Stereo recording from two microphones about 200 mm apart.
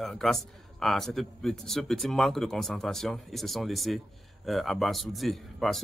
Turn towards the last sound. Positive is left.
turn(degrees=0)  # may be behind; listen again after turning